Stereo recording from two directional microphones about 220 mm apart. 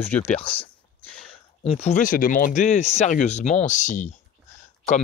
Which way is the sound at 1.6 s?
30° left (ahead or behind).